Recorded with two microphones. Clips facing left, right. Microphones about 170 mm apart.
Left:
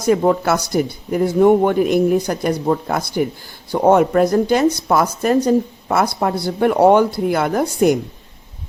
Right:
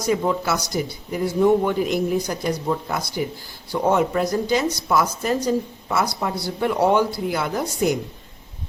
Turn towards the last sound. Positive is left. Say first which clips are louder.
# left 7 dB
turn(degrees=55)  # may be behind; listen again after turning